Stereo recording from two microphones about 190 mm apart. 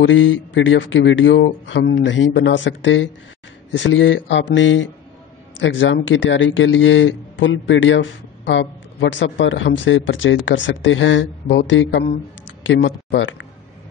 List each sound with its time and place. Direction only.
0.0 s speech: 90° left
5.6 s speech: 75° left (ahead or behind)